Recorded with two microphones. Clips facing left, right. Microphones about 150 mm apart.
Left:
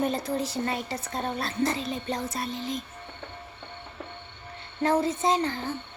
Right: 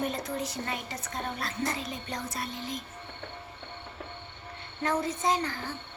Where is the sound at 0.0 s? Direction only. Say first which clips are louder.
Left 5 dB; 35° left (ahead or behind).